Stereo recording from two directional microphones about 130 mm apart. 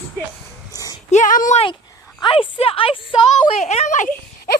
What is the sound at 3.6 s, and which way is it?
Speech, 60° left (ahead or behind).